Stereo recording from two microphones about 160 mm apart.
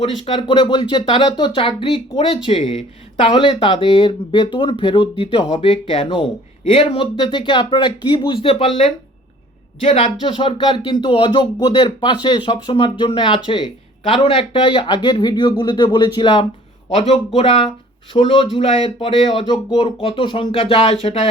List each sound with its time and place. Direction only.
0.0 s speech: 35° left (ahead or behind)
9.8 s speech: 45° left (ahead or behind)
10.2 s speech: 30° left (ahead or behind)